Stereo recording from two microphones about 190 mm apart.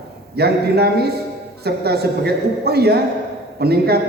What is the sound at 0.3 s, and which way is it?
A man's voice, 55° right (ahead or behind).